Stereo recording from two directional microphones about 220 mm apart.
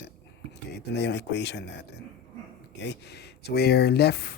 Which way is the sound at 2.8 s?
50° left (ahead or behind).